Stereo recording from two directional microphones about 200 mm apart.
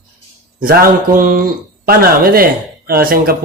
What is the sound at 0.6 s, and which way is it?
Speech, 45° right (ahead or behind).